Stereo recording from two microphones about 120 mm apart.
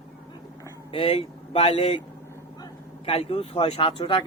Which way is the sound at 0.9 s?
55° left (ahead or behind).